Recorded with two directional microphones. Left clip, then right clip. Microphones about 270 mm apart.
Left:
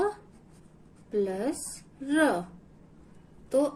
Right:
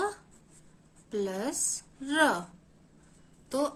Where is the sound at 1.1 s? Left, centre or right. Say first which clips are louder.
Left 3 dB; right.